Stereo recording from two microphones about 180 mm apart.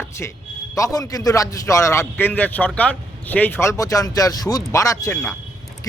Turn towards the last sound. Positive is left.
turn(degrees=15)  # may be behind; listen again after turning